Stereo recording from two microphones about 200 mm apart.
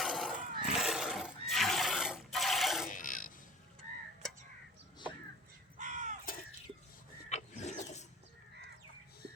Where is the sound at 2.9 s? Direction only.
40° left (ahead or behind).